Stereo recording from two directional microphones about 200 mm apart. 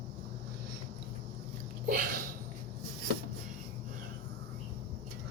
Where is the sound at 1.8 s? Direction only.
45° right (ahead or behind).